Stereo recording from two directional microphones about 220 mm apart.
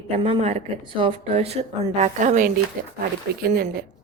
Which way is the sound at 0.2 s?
25° right (ahead or behind).